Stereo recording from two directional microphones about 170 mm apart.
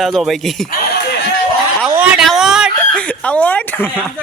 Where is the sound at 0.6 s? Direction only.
65° left (ahead or behind).